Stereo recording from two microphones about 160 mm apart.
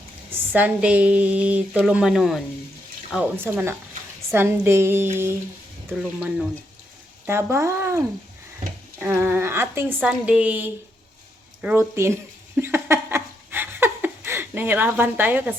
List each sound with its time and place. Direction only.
0.5 s a woman's voice: 10° right (ahead or behind)
3.1 s a woman's voice: 10° right (ahead or behind)
5.9 s speech: 5° right (ahead or behind)
7.5 s a woman's voice: 15° right (ahead or behind)
12.5 s laughter: 15° right (ahead or behind)